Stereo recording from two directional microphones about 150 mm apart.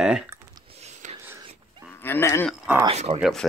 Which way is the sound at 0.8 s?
50° right (ahead or behind).